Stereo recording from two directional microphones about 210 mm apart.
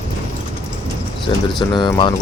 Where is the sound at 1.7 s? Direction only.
20° left (ahead or behind).